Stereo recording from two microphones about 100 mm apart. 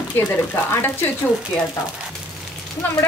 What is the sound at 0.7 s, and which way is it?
Speech, 20° left (ahead or behind).